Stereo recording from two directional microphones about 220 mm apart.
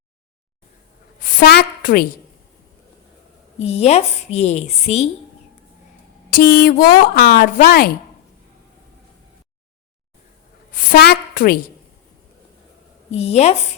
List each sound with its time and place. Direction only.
1.2 s a sound: 40° left (ahead or behind)
3.6 s a woman's voice: 30° left (ahead or behind)
6.3 s a woman's voice: 40° left (ahead or behind)
10.8 s a woman's voice: 45° left (ahead or behind)
13.1 s a woman's voice: 30° left (ahead or behind)